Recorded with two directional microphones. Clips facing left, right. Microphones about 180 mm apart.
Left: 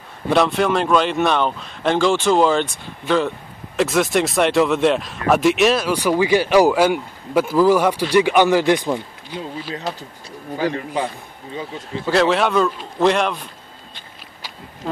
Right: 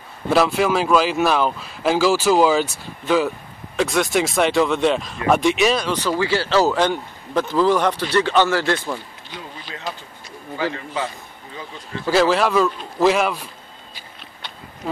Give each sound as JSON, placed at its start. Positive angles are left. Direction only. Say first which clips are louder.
{"t": 0.3, "sound": "speech", "louder": "even", "side_deg": 0}
{"t": 10.6, "sound": "a man's voice", "louder": "left 3 dB", "side_deg": 15}
{"t": 12.1, "sound": "speech", "louder": "even", "side_deg": 0}